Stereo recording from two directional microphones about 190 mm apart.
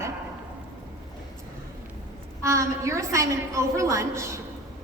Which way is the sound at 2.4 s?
15° right (ahead or behind).